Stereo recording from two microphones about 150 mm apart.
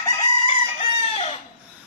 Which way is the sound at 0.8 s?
40° left (ahead or behind).